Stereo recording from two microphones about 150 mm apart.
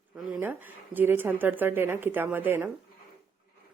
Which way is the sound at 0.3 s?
15° right (ahead or behind).